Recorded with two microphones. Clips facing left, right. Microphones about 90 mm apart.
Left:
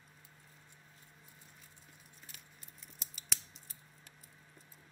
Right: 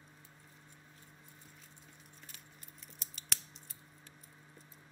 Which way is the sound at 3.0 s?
Centre (ahead or behind).